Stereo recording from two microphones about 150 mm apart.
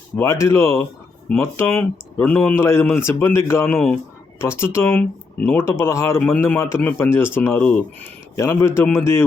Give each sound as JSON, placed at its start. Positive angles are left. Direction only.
{"t": 0.2, "sound": "speech", "side_deg": 15}